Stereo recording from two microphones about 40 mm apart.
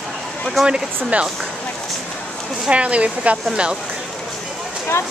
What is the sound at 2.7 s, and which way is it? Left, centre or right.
Speech, right.